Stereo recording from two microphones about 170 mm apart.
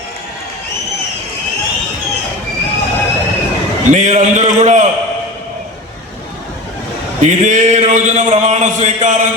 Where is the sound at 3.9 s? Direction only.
45° right (ahead or behind).